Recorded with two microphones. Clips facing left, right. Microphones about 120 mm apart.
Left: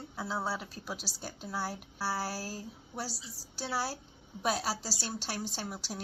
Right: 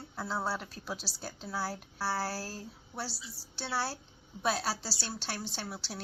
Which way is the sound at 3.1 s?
40° left (ahead or behind).